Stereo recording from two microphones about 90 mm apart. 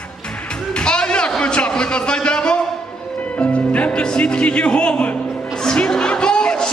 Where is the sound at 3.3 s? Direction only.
15° left (ahead or behind).